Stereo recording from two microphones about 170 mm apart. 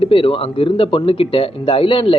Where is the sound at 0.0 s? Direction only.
30° left (ahead or behind).